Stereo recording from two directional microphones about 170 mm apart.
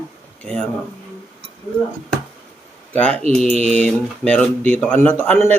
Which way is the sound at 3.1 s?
40° right (ahead or behind).